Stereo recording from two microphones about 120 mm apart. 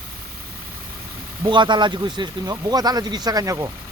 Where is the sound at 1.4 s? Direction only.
40° right (ahead or behind).